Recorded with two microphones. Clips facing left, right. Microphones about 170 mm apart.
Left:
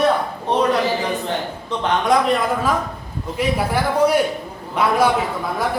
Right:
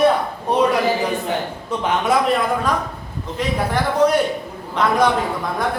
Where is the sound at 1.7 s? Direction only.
5° right (ahead or behind).